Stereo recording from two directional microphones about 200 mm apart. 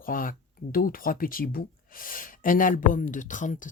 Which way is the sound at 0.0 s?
45° left (ahead or behind).